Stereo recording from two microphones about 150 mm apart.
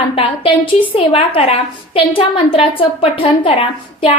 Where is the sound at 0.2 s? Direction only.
35° left (ahead or behind).